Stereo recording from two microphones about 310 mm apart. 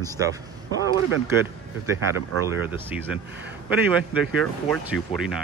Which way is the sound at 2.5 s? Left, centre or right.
Centre.